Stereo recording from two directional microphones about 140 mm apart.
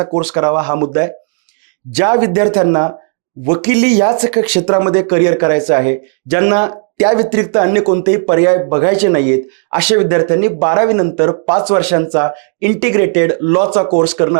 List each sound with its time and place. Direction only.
0.3 s speech: 20° right (ahead or behind)